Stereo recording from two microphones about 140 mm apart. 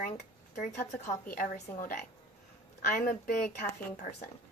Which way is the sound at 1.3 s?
85° left.